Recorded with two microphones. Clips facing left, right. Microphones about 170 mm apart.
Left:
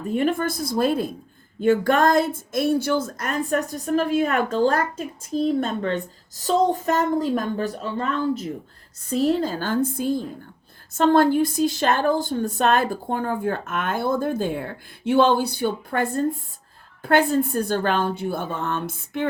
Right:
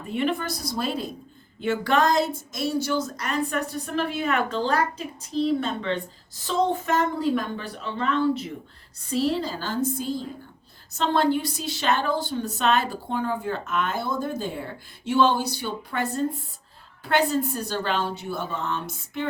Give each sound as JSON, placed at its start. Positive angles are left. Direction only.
{"t": 0.1, "sound": "a woman's voice", "side_deg": 45}